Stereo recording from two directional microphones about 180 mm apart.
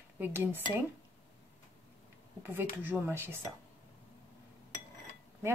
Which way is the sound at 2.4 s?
10° right (ahead or behind).